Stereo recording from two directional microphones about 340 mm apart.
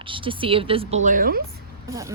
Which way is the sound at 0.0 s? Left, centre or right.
Centre.